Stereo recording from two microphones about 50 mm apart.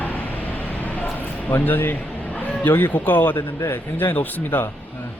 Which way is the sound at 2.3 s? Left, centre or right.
Left.